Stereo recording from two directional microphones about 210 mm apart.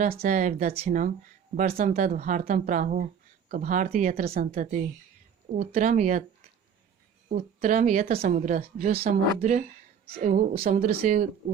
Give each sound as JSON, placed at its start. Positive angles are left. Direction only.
{"t": 0.2, "sound": "speech", "side_deg": -35}
{"t": 7.3, "sound": "speech", "side_deg": -40}